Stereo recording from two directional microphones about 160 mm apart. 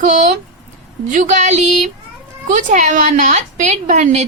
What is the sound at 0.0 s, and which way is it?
A woman's voice, 50° right (ahead or behind).